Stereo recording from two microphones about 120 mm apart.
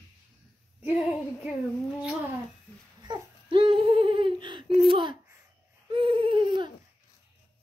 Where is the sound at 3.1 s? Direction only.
45° right (ahead or behind).